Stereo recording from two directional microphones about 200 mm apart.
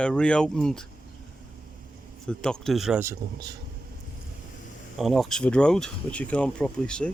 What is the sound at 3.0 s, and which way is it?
Speech, 20° right (ahead or behind).